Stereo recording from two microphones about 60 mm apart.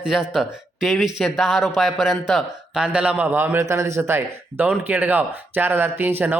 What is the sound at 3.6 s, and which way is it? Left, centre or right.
Speech, right.